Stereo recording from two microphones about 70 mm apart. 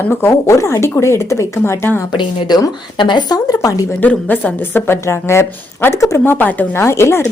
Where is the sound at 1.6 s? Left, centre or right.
Left.